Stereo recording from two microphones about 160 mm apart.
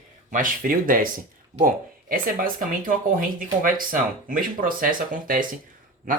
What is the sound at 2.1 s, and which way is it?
Speech, 60° right (ahead or behind).